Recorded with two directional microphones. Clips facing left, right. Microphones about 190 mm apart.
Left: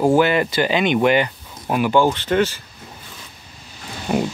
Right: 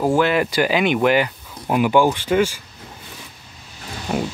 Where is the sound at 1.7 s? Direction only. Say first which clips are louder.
Right 1 dB; 15° right (ahead or behind).